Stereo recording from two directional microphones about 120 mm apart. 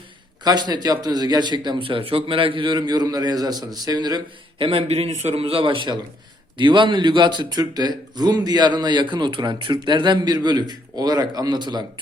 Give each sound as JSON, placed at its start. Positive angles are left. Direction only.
{"t": 0.4, "sound": "a man's voice", "side_deg": -35}